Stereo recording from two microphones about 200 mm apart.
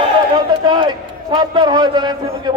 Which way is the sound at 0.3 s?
20° right (ahead or behind).